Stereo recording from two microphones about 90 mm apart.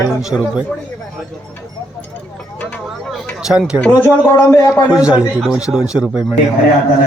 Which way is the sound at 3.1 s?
5° right (ahead or behind).